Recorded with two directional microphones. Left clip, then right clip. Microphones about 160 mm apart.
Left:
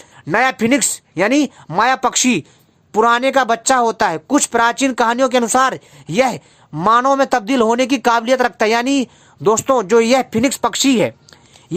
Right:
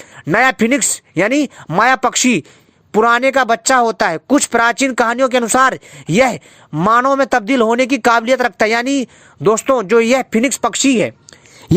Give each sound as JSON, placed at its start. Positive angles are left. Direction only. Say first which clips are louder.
{"t": 0.2, "sound": "speech", "louder": "right 3 dB", "side_deg": -30}